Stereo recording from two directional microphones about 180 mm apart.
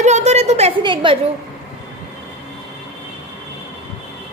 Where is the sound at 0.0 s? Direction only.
40° right (ahead or behind).